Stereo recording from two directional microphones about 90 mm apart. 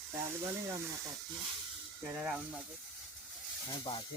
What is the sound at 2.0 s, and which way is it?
Speech, 10° right (ahead or behind).